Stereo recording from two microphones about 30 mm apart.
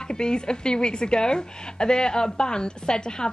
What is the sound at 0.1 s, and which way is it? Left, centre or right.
A woman's voice, left.